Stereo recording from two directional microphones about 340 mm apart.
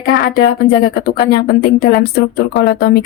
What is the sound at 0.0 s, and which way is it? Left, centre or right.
A woman's voice, left.